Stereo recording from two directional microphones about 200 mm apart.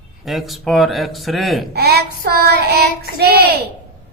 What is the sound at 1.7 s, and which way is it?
Child singing, 50° right (ahead or behind).